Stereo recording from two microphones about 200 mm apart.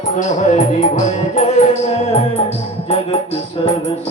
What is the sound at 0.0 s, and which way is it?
Music, 35° left (ahead or behind).